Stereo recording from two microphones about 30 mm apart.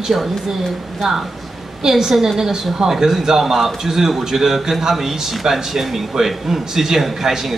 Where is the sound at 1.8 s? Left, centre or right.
Centre.